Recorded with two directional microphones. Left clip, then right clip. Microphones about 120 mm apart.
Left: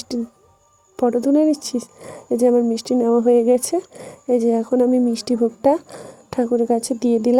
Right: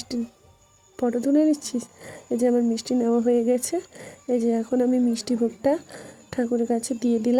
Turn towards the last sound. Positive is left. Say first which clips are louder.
# left 6 dB
turn(degrees=25)  # may be behind; listen again after turning